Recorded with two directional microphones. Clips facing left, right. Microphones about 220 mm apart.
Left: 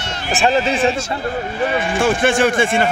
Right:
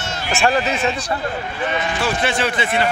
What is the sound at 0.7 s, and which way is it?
Speech, 30° left (ahead or behind).